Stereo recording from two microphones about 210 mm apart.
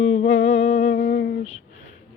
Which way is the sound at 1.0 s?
50° left (ahead or behind).